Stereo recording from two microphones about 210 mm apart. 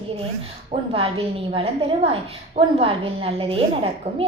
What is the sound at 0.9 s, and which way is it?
A woman's voice, 25° right (ahead or behind).